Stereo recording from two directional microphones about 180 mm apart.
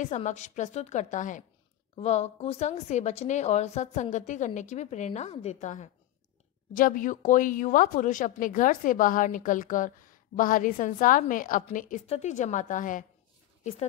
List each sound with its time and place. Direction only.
0.0 s a woman's voice: 40° left (ahead or behind)